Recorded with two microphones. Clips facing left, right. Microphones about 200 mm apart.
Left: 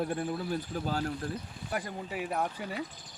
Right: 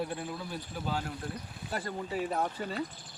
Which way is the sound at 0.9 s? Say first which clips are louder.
Left 2 dB; 40° left (ahead or behind).